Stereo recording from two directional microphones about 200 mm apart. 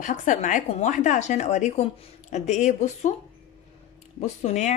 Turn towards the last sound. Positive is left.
turn(degrees=35)  # may be behind; listen again after turning